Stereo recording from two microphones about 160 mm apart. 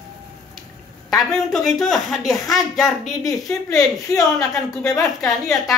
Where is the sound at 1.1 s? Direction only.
Centre (ahead or behind).